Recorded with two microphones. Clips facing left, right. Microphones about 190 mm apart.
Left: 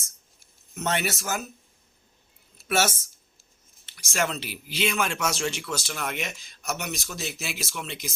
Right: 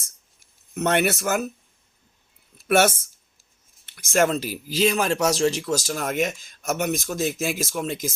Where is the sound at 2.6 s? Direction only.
55° right (ahead or behind).